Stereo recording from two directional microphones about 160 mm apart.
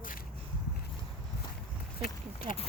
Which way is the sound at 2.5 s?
35° right (ahead or behind).